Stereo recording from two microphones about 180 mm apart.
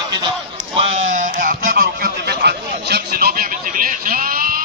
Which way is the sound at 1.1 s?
50° right (ahead or behind).